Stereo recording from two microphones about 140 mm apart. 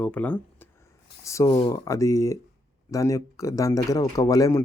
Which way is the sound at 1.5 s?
35° left (ahead or behind).